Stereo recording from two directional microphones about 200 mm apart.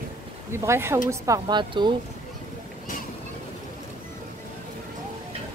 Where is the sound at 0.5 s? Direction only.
10° right (ahead or behind).